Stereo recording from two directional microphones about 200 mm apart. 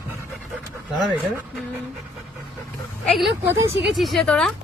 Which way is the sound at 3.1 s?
Centre (ahead or behind).